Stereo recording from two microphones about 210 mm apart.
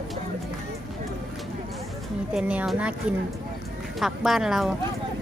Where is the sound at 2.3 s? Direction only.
5° right (ahead or behind).